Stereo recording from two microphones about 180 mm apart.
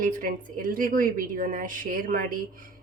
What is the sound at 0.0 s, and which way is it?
A woman's voice, 50° right (ahead or behind).